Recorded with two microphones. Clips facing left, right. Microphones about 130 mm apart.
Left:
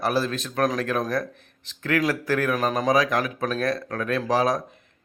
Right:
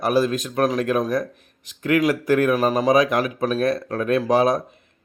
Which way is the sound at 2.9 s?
20° right (ahead or behind).